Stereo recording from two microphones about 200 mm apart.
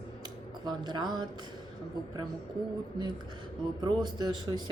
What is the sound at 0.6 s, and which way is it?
Speech, 20° right (ahead or behind).